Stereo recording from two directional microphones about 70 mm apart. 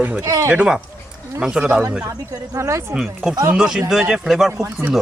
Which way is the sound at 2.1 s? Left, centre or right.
Right.